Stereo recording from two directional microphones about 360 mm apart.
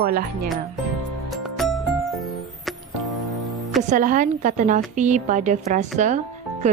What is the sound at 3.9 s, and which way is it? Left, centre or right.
A woman's voice, right.